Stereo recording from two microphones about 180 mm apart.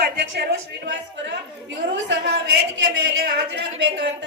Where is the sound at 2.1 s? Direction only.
75° right (ahead or behind).